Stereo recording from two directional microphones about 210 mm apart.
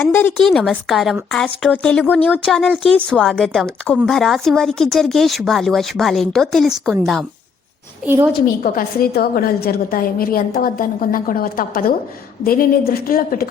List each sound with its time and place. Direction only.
0.0 s a woman's voice: 10° left (ahead or behind); by 8.4 s 10° right (ahead or behind)
8.6 s a woman's voice: 45° left (ahead or behind)